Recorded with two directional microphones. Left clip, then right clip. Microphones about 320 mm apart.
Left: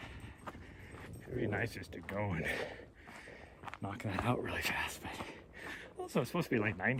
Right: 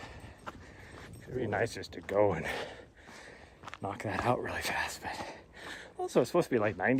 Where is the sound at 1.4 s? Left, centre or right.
Centre.